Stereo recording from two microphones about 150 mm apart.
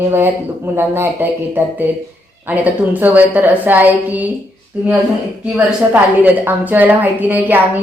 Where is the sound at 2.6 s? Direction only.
10° right (ahead or behind).